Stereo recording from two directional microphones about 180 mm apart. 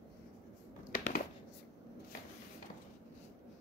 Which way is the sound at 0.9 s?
50° left (ahead or behind).